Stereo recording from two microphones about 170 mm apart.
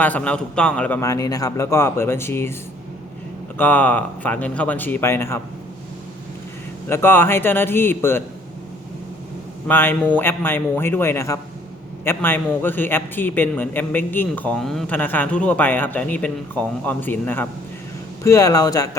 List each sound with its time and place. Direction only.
0.0 s a man's voice: 10° left (ahead or behind)
3.6 s a man's voice: 10° left (ahead or behind)
6.8 s a man's voice: 15° left (ahead or behind)
9.6 s a man's voice: 10° left (ahead or behind)